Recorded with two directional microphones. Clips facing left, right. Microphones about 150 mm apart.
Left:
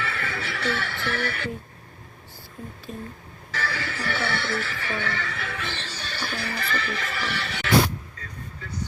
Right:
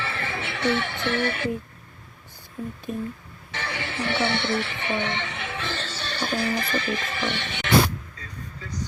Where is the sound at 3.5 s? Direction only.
25° right (ahead or behind).